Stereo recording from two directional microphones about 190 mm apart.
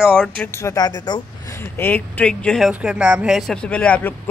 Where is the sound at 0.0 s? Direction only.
5° left (ahead or behind).